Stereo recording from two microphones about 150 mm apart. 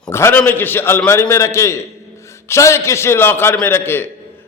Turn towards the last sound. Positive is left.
turn(degrees=15)  # may be behind; listen again after turning